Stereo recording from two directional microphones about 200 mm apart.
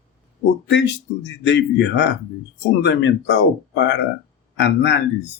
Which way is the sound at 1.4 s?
60° left (ahead or behind).